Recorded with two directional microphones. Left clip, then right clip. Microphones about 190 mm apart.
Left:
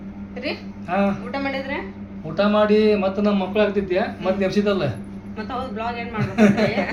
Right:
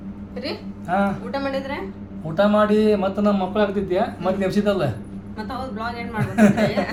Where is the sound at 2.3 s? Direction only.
20° right (ahead or behind).